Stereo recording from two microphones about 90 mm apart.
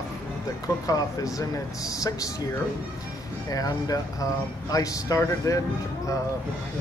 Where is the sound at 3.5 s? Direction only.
40° left (ahead or behind).